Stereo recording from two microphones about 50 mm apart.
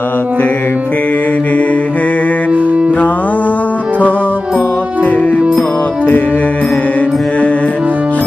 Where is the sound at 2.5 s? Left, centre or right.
Right.